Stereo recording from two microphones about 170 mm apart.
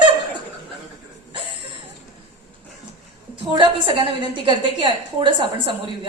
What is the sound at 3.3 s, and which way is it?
A woman's voice, 30° right (ahead or behind).